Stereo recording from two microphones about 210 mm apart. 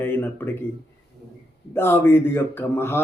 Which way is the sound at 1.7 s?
10° left (ahead or behind).